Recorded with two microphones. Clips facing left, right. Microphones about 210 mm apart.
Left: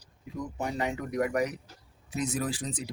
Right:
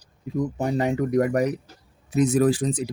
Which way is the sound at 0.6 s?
40° right (ahead or behind).